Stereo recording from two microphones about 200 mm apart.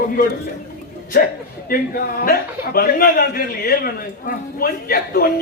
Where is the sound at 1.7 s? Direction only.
45° left (ahead or behind).